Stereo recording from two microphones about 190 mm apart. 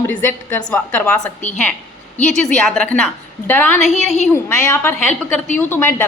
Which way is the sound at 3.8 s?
35° left (ahead or behind).